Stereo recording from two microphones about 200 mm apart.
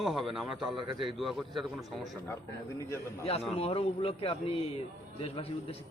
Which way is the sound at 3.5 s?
30° left (ahead or behind).